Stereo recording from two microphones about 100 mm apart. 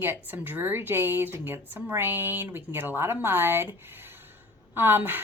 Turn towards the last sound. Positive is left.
turn(degrees=-20)  # may be behind; listen again after turning